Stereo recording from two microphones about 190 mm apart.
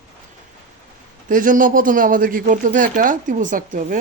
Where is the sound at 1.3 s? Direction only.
45° right (ahead or behind).